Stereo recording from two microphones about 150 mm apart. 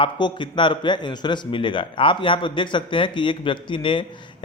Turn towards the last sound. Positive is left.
turn(degrees=35)  # may be behind; listen again after turning